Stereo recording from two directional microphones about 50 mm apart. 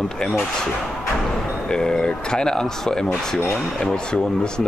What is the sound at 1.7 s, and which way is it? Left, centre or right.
Speech, centre.